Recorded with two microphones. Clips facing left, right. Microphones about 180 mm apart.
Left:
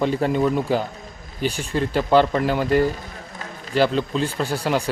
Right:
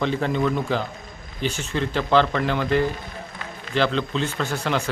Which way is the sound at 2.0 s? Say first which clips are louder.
Left 3 dB; 10° left (ahead or behind).